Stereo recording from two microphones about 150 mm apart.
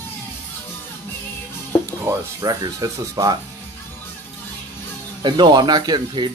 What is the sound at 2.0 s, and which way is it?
Speech, 25° right (ahead or behind).